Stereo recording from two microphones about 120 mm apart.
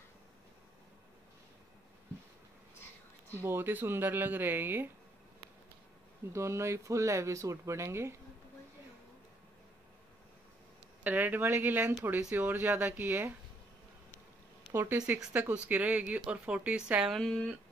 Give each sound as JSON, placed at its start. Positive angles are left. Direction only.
{"t": 3.4, "sound": "speech", "side_deg": -20}
{"t": 6.3, "sound": "speech", "side_deg": -25}
{"t": 11.1, "sound": "speech", "side_deg": -15}
{"t": 14.7, "sound": "speech", "side_deg": -20}